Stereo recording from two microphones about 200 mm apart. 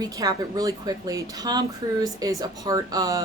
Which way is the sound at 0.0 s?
20° right (ahead or behind).